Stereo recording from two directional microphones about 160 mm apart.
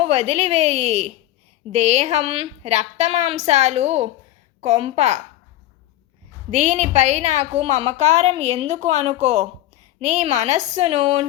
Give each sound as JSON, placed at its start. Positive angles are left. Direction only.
{"t": 0.0, "sound": "a woman's voice", "side_deg": -45}
{"t": 6.5, "sound": "a woman's voice", "side_deg": -45}